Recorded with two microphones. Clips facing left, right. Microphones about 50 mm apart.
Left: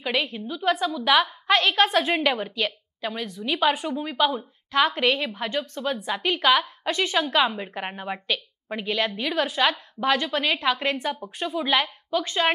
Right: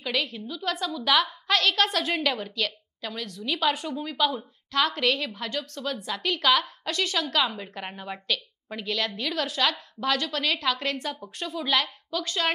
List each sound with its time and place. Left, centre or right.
0.0 s a woman's voice: left